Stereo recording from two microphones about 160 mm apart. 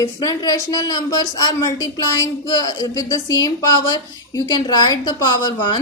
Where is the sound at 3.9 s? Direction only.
25° left (ahead or behind).